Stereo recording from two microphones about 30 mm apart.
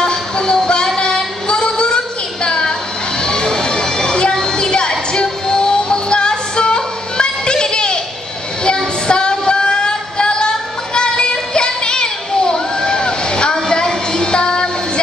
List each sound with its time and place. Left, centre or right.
0.0 s music: left
0.9 s child singing: left
2.4 s a sound: left
14.3 s music: left